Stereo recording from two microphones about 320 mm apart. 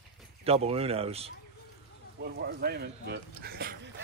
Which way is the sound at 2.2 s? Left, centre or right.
Right.